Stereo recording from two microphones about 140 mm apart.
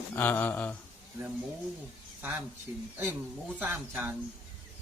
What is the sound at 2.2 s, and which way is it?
Speech, 10° right (ahead or behind).